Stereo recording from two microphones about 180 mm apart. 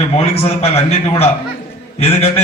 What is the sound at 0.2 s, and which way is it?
A man's voice, 35° left (ahead or behind).